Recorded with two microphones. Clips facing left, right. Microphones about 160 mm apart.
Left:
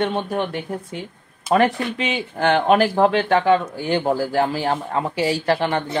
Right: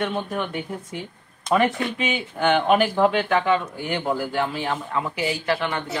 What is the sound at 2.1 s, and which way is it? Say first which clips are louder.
A man's voice: left 2 dB; 35° left (ahead or behind).